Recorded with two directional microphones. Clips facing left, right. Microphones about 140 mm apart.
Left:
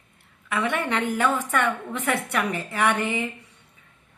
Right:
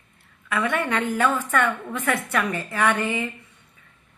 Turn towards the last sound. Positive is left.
turn(degrees=20)  # may be behind; listen again after turning